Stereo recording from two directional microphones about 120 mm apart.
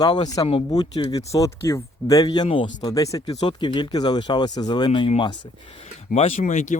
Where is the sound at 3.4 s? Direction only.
40° left (ahead or behind).